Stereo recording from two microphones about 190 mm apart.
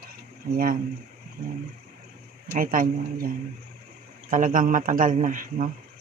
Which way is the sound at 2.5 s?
45° right (ahead or behind).